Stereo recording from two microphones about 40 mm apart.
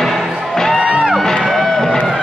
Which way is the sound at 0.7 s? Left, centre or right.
Right.